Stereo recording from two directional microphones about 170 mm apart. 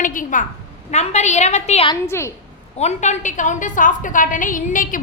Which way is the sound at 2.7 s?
40° left (ahead or behind).